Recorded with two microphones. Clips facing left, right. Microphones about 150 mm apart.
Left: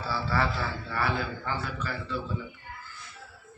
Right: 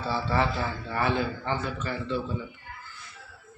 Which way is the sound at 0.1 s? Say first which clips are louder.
Right 3 dB; 20° right (ahead or behind).